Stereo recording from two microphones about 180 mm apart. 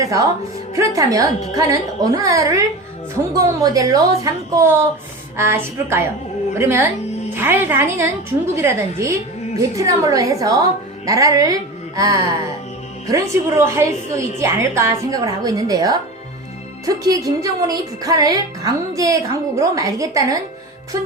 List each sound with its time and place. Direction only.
0.0 s a woman's voice: 20° right (ahead or behind)